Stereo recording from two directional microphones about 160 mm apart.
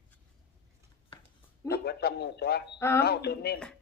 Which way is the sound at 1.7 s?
85° left.